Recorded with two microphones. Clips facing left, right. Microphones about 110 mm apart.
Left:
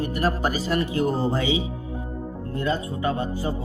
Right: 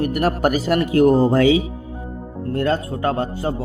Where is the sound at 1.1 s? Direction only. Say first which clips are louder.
Right 9 dB; 50° right (ahead or behind).